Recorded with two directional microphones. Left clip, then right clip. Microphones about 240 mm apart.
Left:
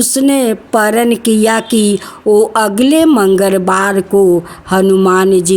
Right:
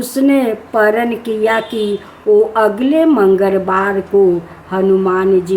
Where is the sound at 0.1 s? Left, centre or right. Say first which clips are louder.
Right 1 dB; left.